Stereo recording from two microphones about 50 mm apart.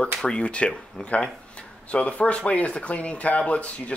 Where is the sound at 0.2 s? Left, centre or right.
Left.